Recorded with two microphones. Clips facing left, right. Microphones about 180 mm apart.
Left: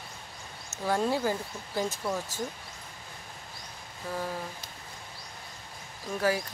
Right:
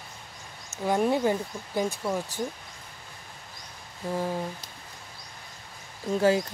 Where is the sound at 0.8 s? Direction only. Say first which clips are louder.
Right 4 dB; 15° right (ahead or behind).